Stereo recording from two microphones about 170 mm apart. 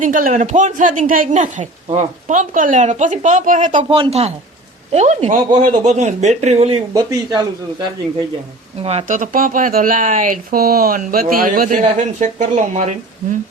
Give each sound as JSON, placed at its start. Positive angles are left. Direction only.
{"t": 0.0, "sound": "speech", "side_deg": -50}
{"t": 3.8, "sound": "speech", "side_deg": -30}
{"t": 6.9, "sound": "speech", "side_deg": -20}
{"t": 8.8, "sound": "speech", "side_deg": -35}